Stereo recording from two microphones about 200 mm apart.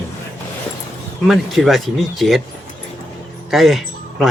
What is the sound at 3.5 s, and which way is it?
Speech, centre (ahead or behind).